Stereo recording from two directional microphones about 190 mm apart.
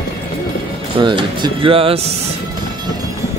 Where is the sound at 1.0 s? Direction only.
25° right (ahead or behind).